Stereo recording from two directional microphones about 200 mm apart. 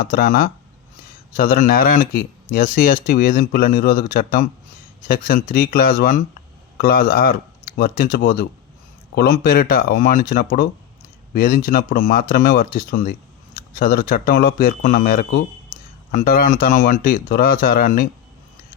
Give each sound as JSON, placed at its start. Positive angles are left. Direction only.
{"t": 0.0, "sound": "speech", "side_deg": 45}